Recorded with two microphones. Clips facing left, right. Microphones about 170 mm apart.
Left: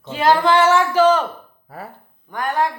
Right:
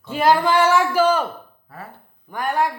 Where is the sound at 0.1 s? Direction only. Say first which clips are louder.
Left 1 dB; 10° right (ahead or behind).